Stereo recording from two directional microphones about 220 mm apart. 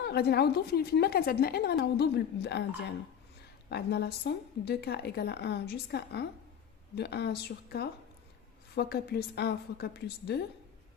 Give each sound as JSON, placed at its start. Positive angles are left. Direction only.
{"t": 0.0, "sound": "a woman's voice", "side_deg": 45}
{"t": 3.7, "sound": "a woman's voice", "side_deg": 50}